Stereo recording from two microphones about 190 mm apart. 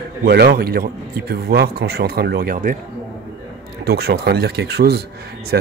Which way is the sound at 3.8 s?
60° right (ahead or behind).